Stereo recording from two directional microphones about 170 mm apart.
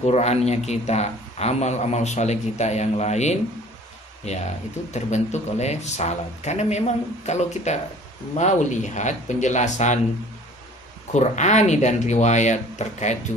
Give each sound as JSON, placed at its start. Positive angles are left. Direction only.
{"t": 0.0, "sound": "speech", "side_deg": 40}
{"t": 11.1, "sound": "speech", "side_deg": 45}